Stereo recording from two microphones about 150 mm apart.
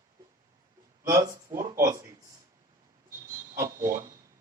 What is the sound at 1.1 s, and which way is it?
Speech, 20° right (ahead or behind).